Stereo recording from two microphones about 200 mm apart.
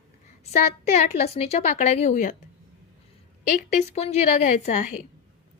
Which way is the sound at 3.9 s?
35° left (ahead or behind).